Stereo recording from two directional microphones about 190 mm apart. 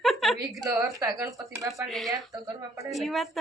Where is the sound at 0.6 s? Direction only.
20° right (ahead or behind).